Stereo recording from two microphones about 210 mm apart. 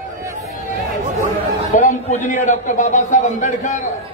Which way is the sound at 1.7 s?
35° left (ahead or behind).